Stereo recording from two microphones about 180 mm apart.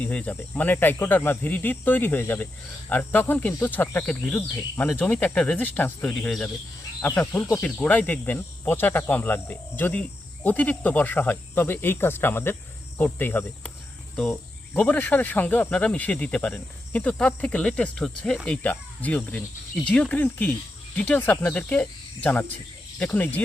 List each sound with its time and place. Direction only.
0.0 s cricket: 5° left (ahead or behind)